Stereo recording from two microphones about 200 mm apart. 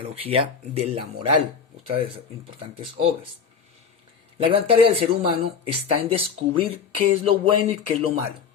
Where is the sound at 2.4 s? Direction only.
30° right (ahead or behind).